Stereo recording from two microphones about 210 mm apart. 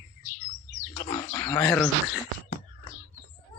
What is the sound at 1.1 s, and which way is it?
Speech, 15° left (ahead or behind).